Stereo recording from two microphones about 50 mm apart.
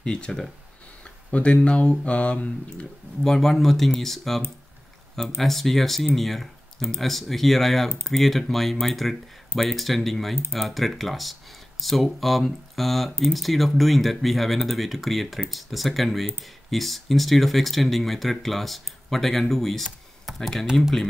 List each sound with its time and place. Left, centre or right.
0.0 s speech: centre
3.3 s speech: centre
5.4 s speech: centre